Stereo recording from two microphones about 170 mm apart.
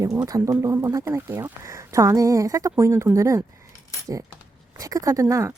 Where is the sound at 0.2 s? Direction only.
20° right (ahead or behind).